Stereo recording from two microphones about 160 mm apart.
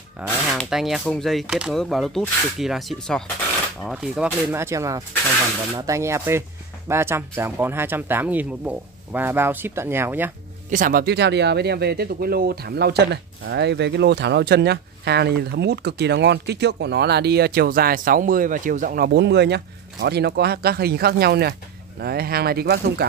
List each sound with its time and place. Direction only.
0.5 s speech: centre (ahead or behind)
10.7 s speech: 60° right (ahead or behind); by 23.0 s 80° right